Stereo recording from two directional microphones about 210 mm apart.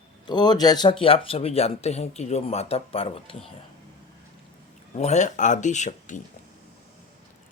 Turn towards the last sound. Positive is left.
turn(degrees=35)  # may be behind; listen again after turning